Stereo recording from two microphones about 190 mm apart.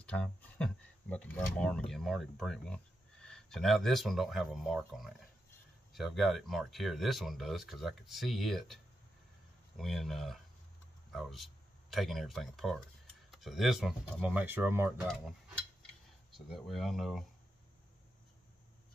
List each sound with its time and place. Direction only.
0.0 s speech: 5° left (ahead or behind); by 14.9 s 10° right (ahead or behind)
15.0 s cutlery: centre (ahead or behind)
16.3 s speech: centre (ahead or behind)